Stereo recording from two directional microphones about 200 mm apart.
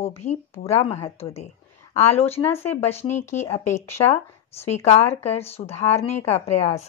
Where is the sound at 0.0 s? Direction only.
30° left (ahead or behind).